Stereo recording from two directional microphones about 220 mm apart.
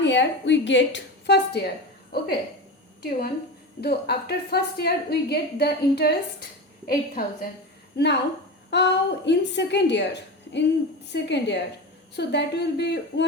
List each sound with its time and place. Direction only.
0.0 s a woman's voice: 55° left (ahead or behind)